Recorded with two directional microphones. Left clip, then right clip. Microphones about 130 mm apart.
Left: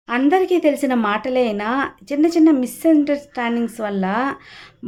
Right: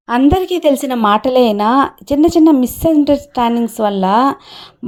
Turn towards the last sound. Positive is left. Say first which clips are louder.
# right 9 dB
turn(degrees=-45)  # may be behind; listen again after turning